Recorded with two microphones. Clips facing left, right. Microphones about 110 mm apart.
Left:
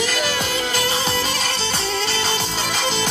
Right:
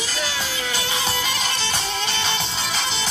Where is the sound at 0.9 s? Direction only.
35° left (ahead or behind).